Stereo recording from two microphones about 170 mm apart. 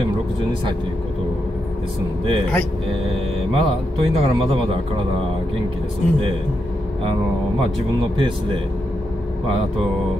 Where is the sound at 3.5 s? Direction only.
35° right (ahead or behind).